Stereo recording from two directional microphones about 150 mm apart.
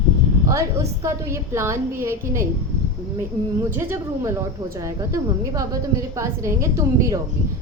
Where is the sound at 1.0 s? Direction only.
20° right (ahead or behind).